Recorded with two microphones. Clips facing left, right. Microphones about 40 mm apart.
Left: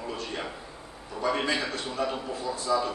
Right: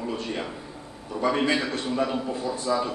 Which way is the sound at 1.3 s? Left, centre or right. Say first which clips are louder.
Right 3 dB; right.